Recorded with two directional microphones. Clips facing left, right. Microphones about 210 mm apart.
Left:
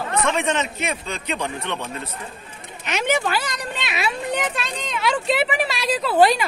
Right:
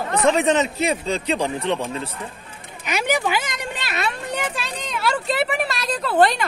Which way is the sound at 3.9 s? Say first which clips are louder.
Left 2 dB; 5° left (ahead or behind).